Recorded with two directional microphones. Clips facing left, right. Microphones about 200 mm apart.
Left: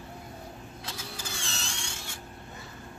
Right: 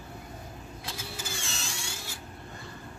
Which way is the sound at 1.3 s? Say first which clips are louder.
Right 1 dB; centre (ahead or behind).